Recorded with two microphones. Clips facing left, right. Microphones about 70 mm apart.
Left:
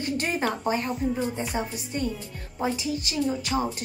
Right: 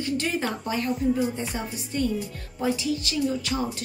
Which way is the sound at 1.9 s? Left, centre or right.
Left.